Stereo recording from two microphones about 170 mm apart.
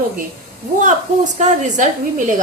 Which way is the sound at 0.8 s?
45° right (ahead or behind).